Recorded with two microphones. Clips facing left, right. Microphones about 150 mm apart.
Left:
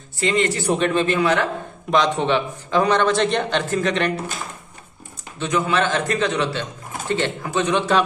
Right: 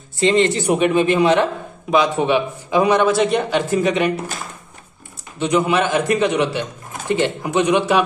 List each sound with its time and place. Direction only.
0.2 s speech: 25° right (ahead or behind)
0.7 s speech: 10° right (ahead or behind)
1.9 s speech: 5° right (ahead or behind)
5.4 s speech: 15° right (ahead or behind)